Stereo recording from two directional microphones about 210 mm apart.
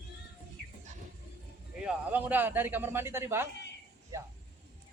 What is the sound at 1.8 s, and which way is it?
A man's voice, 5° right (ahead or behind).